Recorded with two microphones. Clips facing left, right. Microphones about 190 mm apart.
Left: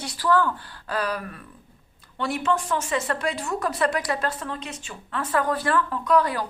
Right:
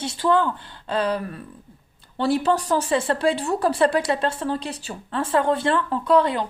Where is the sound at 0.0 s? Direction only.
25° right (ahead or behind).